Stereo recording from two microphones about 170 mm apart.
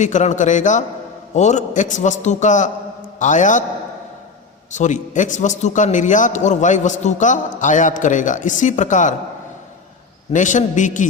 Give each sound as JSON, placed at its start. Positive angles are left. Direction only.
{"t": 0.0, "sound": "a man's voice", "side_deg": 45}
{"t": 4.7, "sound": "a man's voice", "side_deg": 45}
{"t": 10.3, "sound": "a man's voice", "side_deg": 45}